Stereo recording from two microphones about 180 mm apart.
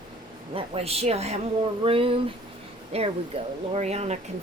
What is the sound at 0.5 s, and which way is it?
A woman's voice, 30° right (ahead or behind).